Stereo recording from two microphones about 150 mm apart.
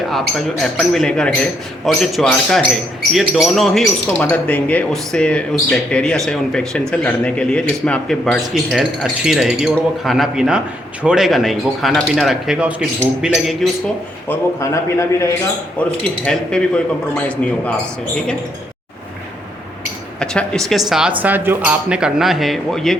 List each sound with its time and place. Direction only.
0.6 s a man's voice: 5° left (ahead or behind)
14.3 s a man's voice: 20° left (ahead or behind)
15.8 s speech: 5° left (ahead or behind)
20.1 s a man's voice: 5° left (ahead or behind)